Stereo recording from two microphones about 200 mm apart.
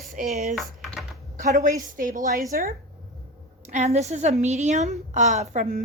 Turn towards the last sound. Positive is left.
turn(degrees=-40)  # may be behind; listen again after turning